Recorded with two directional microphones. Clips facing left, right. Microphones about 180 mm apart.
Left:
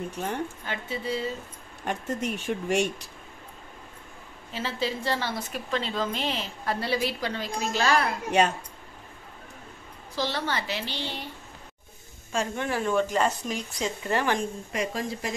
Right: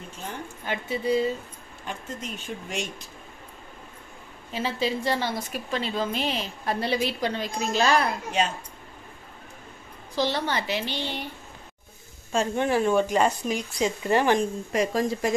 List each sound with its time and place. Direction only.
0.1 s speech: 65° left (ahead or behind)
0.7 s a woman's voice: 15° right (ahead or behind)
1.9 s speech: 65° left (ahead or behind)
4.5 s a woman's voice: 15° right (ahead or behind)
10.1 s a woman's voice: 15° right (ahead or behind)
12.3 s speech: 25° right (ahead or behind)
14.7 s speech: 40° right (ahead or behind)